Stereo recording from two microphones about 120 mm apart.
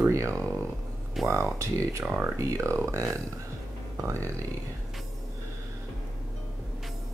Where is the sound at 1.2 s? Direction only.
25° right (ahead or behind).